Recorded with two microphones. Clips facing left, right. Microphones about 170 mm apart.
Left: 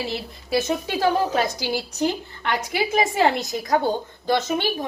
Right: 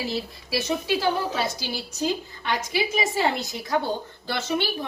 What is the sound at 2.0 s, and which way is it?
A woman's voice, 60° left (ahead or behind).